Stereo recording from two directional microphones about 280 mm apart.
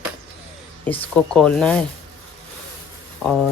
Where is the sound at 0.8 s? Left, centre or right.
Centre.